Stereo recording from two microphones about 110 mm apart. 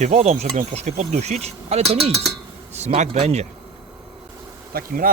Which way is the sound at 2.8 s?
90° right.